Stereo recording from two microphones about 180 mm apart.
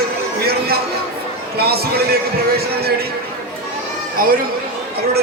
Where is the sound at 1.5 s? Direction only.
60° right (ahead or behind).